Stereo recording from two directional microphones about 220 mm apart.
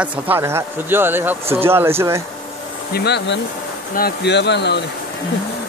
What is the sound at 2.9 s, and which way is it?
Speech, 50° left (ahead or behind).